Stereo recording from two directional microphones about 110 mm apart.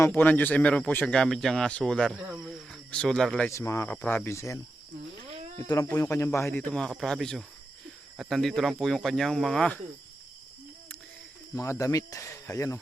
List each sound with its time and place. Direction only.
0.0 s speech: 20° left (ahead or behind); by 2.1 s 5° left (ahead or behind)
2.1 s speech: 10° right (ahead or behind)
2.5 s speech: 5° left (ahead or behind)
3.5 s speech: 25° left (ahead or behind)
3.8 s speech: 15° left (ahead or behind)
5.6 s speech: 30° left (ahead or behind); by 9.8 s 5° left (ahead or behind)
11.5 s speech: 25° left (ahead or behind)